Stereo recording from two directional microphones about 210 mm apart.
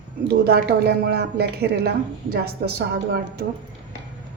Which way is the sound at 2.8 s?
50° right (ahead or behind).